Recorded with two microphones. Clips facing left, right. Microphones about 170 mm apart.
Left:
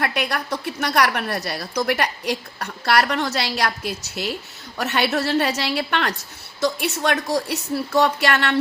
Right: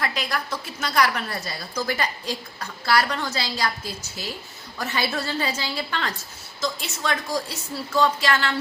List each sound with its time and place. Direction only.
0.0 s a woman's voice: 65° left (ahead or behind)